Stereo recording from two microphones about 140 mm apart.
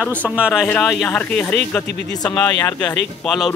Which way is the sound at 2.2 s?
30° left (ahead or behind).